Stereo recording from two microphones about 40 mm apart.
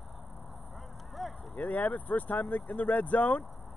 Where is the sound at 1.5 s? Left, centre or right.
Left.